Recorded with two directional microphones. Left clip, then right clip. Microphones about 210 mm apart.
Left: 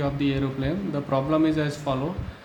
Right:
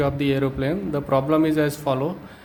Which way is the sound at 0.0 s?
45° right (ahead or behind).